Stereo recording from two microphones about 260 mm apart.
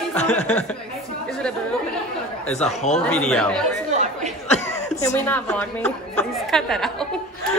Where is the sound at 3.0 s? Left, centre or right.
Centre.